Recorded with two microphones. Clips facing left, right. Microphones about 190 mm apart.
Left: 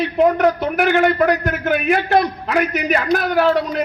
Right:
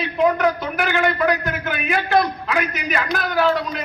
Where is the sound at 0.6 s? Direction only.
55° left (ahead or behind).